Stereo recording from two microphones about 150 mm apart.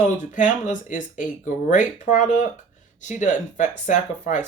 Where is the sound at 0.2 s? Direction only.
60° left (ahead or behind).